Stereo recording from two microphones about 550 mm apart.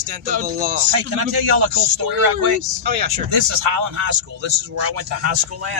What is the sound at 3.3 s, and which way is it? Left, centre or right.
Speech, right.